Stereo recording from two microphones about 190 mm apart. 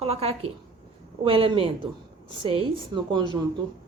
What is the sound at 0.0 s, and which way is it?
A woman's voice, 30° right (ahead or behind).